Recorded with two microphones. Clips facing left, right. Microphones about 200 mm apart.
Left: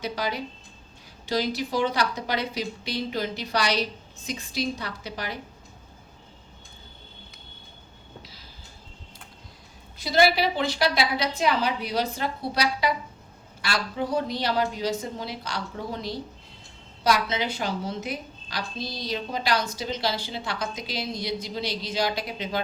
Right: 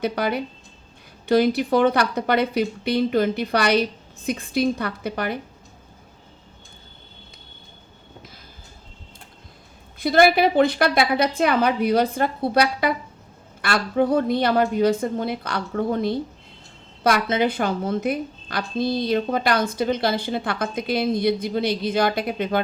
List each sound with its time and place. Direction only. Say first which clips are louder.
0.0 s a woman's voice: right 6 dB; 55° right (ahead or behind)
10.0 s a woman's voice: right 5 dB; 55° right (ahead or behind)